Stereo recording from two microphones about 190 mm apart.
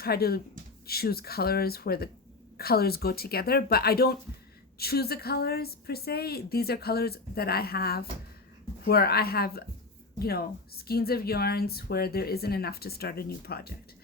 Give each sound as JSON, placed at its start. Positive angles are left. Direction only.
{"t": 0.0, "sound": "a woman's voice", "side_deg": 55}